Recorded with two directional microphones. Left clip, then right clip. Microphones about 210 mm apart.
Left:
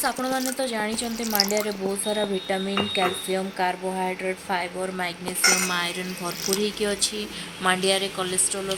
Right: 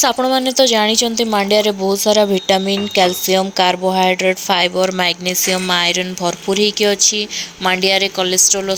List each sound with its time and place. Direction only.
0.0 s a woman's voice: 30° right (ahead or behind)